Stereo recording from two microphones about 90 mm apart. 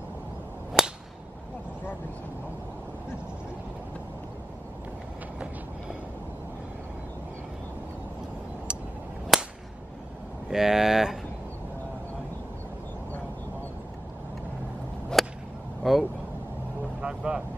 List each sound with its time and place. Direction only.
0.8 s whip: 5° right (ahead or behind)
9.3 s whip: centre (ahead or behind)
10.5 s a sound: 5° right (ahead or behind)
15.2 s whip: centre (ahead or behind)
15.8 s vehicle: centre (ahead or behind)
17.0 s vehicle: 10° right (ahead or behind)